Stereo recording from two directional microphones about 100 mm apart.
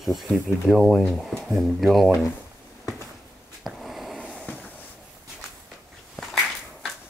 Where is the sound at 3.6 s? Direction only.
Centre (ahead or behind).